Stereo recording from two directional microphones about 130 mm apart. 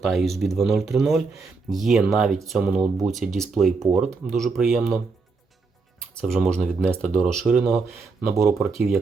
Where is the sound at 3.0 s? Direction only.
Centre (ahead or behind).